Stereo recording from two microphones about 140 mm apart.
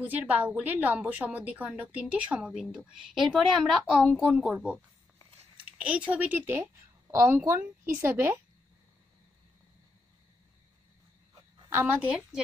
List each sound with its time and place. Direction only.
0.0 s a woman's voice: 10° right (ahead or behind)
11.7 s a woman's voice: 15° right (ahead or behind)